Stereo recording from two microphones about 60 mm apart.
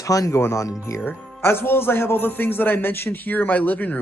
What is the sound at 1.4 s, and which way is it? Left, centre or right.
A man's voice, left.